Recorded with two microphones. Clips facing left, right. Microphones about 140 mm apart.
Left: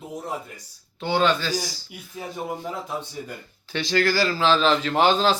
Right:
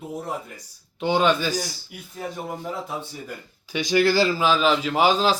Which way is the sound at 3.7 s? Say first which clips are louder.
Right 3 dB; 15° right (ahead or behind).